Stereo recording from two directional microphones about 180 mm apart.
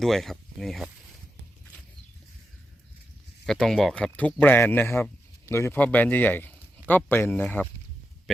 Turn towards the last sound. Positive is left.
turn(degrees=10)  # may be behind; listen again after turning